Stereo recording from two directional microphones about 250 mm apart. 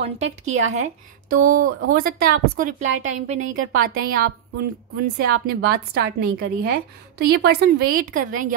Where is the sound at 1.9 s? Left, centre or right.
Right.